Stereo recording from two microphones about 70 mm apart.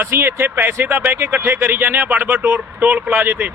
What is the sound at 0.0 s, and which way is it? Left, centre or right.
Speech, right.